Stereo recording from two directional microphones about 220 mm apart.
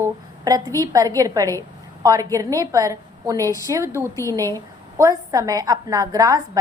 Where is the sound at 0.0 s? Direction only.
15° right (ahead or behind).